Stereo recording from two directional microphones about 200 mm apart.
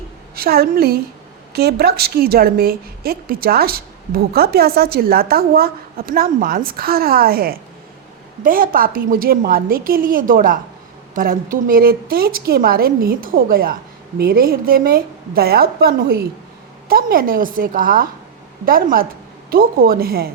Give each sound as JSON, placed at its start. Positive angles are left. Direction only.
{"t": 0.3, "sound": "a woman's voice", "side_deg": -50}